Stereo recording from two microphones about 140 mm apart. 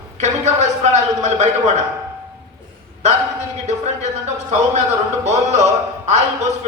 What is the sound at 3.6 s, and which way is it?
Speech, 55° right (ahead or behind).